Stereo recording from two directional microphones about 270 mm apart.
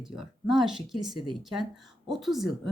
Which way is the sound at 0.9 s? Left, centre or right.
Centre.